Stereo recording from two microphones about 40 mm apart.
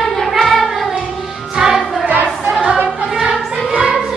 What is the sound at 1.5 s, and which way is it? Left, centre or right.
Music, centre.